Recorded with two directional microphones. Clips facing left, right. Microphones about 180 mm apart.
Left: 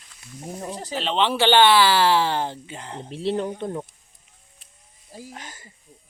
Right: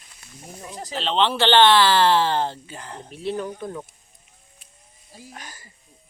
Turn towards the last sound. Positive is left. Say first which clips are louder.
# left 1 dB
turn(degrees=20)  # may be behind; listen again after turning